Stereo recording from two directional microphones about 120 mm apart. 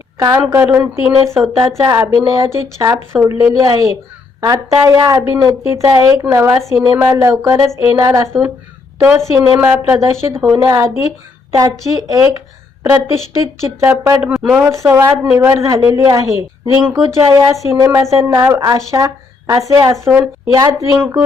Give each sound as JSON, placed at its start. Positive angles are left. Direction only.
{"t": 0.5, "sound": "a woman's voice", "side_deg": -20}
{"t": 3.2, "sound": "a woman's voice", "side_deg": -15}
{"t": 14.3, "sound": "speech", "side_deg": 0}
{"t": 14.6, "sound": "a woman's voice", "side_deg": -20}